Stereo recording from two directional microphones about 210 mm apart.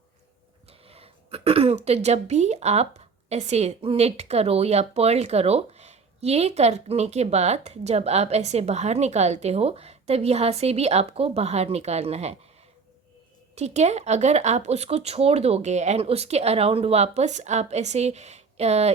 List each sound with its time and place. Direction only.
0.7 s a woman's voice: 30° right (ahead or behind)
13.6 s a woman's voice: 30° right (ahead or behind)